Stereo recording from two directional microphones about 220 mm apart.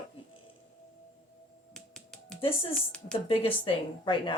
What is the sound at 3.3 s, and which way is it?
A woman's voice, 25° left (ahead or behind).